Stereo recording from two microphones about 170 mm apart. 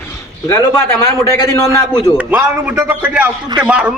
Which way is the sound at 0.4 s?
15° left (ahead or behind).